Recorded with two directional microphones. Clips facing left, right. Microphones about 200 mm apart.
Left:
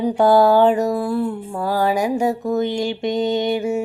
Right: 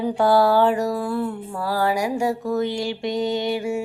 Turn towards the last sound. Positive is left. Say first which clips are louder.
# left 4 dB
turn(degrees=20)  # may be behind; listen again after turning